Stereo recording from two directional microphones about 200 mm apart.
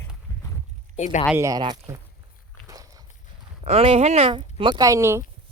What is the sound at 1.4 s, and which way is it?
Speech, 15° right (ahead or behind).